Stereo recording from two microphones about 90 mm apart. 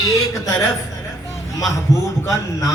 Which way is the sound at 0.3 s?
40° left (ahead or behind).